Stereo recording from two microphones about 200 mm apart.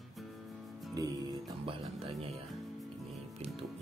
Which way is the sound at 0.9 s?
20° right (ahead or behind).